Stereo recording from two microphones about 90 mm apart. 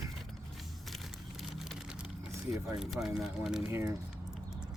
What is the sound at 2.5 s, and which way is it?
Speech, centre (ahead or behind).